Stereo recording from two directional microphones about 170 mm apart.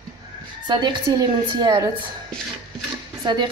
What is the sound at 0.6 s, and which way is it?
A woman's voice, 25° right (ahead or behind).